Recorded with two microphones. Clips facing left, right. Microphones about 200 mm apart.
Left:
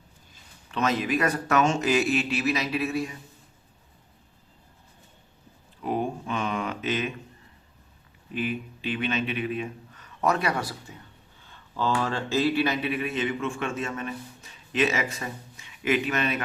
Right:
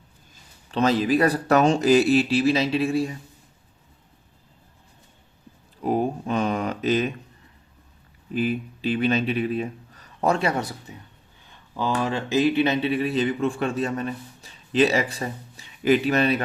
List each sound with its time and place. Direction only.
0.7 s speech: 30° right (ahead or behind)
5.8 s a sound: 40° right (ahead or behind)
8.3 s speech: 35° right (ahead or behind)